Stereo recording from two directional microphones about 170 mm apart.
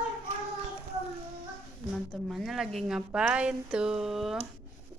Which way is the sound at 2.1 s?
Centre (ahead or behind).